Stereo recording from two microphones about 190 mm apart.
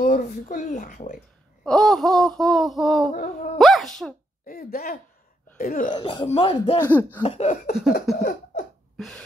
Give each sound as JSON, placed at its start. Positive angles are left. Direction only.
{"t": 0.0, "sound": "speech", "side_deg": 40}
{"t": 1.6, "sound": "speech", "side_deg": 5}
{"t": 3.1, "sound": "speech", "side_deg": 40}
{"t": 3.5, "sound": "speech", "side_deg": 0}
{"t": 4.5, "sound": "speech", "side_deg": 50}
{"t": 5.9, "sound": "speech", "side_deg": 25}
{"t": 6.8, "sound": "speech", "side_deg": 10}
{"t": 7.2, "sound": "speech", "side_deg": 35}
{"t": 8.2, "sound": "a sound", "side_deg": 50}
{"t": 8.9, "sound": "throat clearing", "side_deg": 0}